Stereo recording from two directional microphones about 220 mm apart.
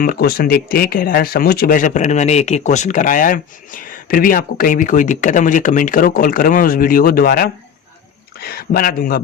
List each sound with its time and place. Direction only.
0.0 s speech: 45° left (ahead or behind)